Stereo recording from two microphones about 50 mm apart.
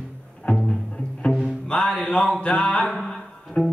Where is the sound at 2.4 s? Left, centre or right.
Left.